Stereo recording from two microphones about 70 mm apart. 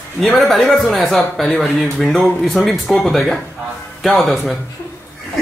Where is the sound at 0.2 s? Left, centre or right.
Centre.